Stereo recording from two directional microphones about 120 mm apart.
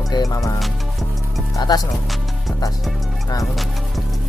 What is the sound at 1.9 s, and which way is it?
Music, centre (ahead or behind).